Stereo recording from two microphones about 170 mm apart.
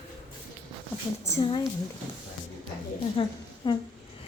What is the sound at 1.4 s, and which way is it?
Speech, 30° left (ahead or behind).